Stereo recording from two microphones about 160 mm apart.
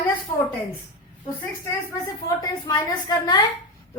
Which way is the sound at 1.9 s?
20° left (ahead or behind).